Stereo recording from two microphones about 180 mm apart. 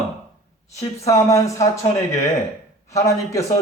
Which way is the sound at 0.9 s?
15° left (ahead or behind).